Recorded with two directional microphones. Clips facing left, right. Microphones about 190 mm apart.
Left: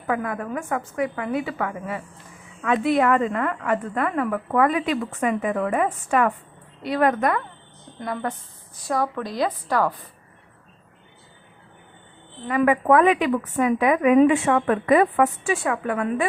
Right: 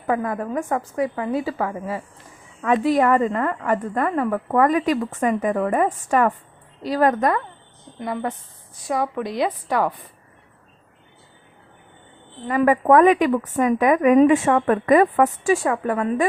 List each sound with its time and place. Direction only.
0.1 s a woman's voice: 35° right (ahead or behind)
7.9 s a woman's voice: 20° right (ahead or behind)
12.5 s a woman's voice: 35° right (ahead or behind)